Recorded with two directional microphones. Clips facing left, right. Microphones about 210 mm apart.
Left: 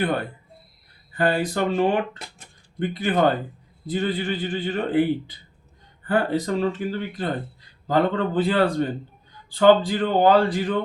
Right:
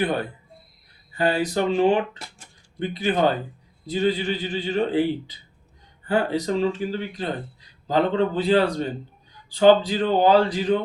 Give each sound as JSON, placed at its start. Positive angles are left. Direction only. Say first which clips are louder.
{"t": 1.1, "sound": "a man's voice", "louder": "even", "side_deg": 55}